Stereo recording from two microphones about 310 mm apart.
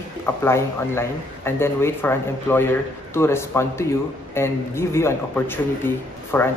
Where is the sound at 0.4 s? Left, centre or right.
Centre.